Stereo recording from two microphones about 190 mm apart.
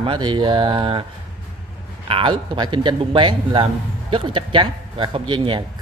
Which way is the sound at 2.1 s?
25° right (ahead or behind).